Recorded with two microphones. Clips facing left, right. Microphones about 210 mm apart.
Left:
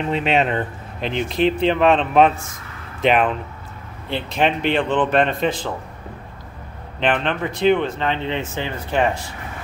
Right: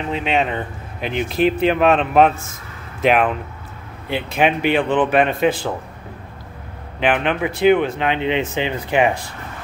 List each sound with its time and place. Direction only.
0.1 s speech: centre (ahead or behind)
7.0 s speech: 10° right (ahead or behind)